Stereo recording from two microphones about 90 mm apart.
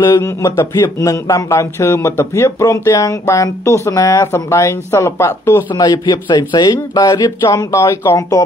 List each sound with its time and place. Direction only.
0.0 s speech: 40° left (ahead or behind)
5.8 s speech: 45° left (ahead or behind); by 8.4 s 30° left (ahead or behind)